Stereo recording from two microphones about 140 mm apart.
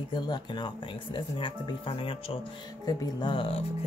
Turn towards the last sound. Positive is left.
turn(degrees=40)  # may be behind; listen again after turning